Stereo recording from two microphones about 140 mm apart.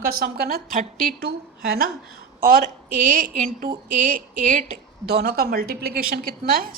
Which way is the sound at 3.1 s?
80° right.